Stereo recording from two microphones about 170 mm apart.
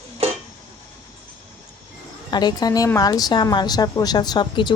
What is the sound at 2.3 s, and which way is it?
A woman's voice, 25° left (ahead or behind).